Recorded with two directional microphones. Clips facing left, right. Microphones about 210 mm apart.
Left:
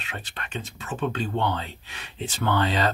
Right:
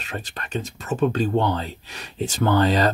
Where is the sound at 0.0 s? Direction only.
40° right (ahead or behind).